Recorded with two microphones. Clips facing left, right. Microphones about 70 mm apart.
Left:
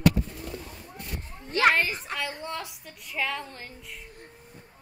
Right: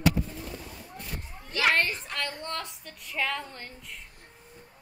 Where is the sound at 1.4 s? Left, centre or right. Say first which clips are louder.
Left 4 dB; left.